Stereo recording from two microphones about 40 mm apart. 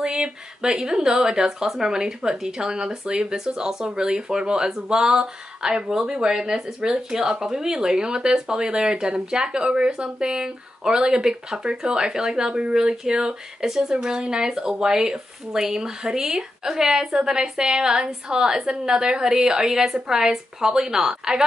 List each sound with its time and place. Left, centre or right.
0.0 s speech: centre